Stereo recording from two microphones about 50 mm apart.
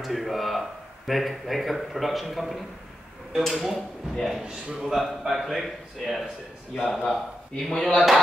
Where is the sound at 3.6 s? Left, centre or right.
Centre.